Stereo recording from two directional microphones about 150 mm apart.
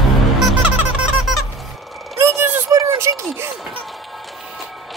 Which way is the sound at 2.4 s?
15° right (ahead or behind).